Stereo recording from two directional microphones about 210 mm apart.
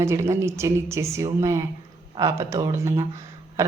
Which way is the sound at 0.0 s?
15° right (ahead or behind).